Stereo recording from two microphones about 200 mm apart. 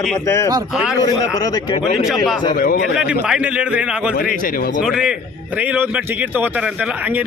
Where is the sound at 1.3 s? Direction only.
20° left (ahead or behind).